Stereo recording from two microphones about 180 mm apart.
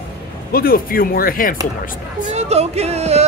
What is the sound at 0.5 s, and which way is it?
Speech, 55° left (ahead or behind).